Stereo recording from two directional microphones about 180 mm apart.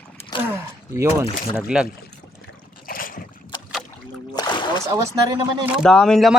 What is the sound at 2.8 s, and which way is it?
Boat, 50° left (ahead or behind).